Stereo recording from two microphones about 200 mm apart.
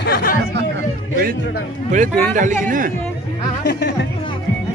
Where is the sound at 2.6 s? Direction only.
40° right (ahead or behind).